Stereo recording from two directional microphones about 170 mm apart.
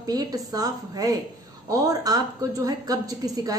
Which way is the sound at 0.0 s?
20° right (ahead or behind).